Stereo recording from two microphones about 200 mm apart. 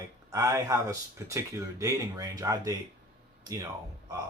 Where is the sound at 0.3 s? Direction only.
15° right (ahead or behind).